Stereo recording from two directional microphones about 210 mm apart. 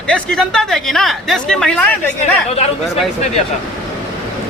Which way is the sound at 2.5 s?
30° left (ahead or behind).